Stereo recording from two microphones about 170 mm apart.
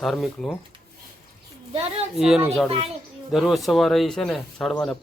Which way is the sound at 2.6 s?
30° right (ahead or behind).